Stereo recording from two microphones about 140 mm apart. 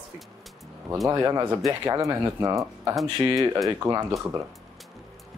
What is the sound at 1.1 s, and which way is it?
Speech, 25° right (ahead or behind).